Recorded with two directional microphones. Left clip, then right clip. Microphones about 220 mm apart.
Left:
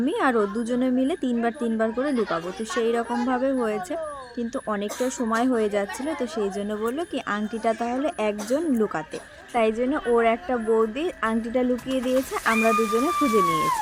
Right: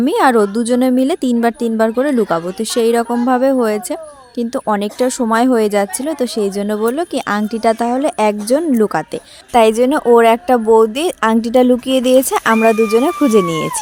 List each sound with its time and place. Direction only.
0.0 s speech: 45° right (ahead or behind)